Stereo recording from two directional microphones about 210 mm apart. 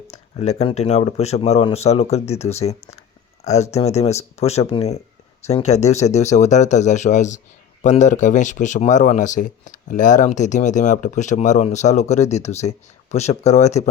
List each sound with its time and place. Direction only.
0.1 s speech: 30° left (ahead or behind)